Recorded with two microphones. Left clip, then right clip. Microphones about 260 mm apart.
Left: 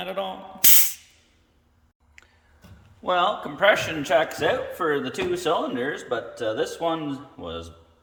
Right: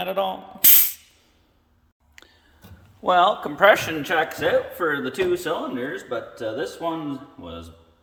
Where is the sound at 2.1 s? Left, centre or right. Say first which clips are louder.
Right 3 dB; right.